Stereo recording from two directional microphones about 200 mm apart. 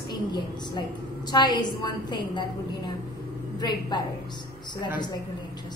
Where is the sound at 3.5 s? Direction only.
20° left (ahead or behind).